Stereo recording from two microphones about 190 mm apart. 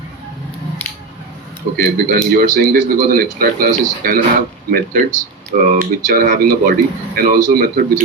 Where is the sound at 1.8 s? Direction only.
50° right (ahead or behind).